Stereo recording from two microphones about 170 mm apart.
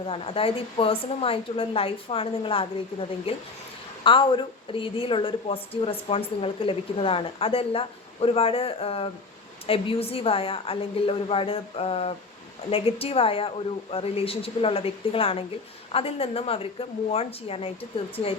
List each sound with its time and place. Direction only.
0.0 s a woman's voice: 35° left (ahead or behind)